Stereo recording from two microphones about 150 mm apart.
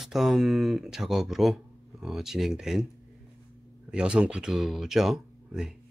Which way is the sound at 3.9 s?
5° right (ahead or behind).